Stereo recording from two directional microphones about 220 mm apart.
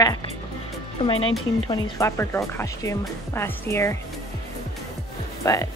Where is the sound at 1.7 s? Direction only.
15° left (ahead or behind).